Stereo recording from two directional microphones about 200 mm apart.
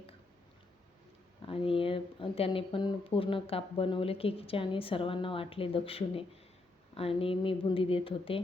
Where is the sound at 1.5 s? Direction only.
25° left (ahead or behind).